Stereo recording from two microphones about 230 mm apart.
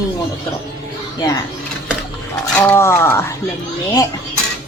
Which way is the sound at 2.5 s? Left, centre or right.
Centre.